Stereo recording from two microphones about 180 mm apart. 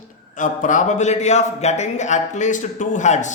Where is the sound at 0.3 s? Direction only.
45° left (ahead or behind).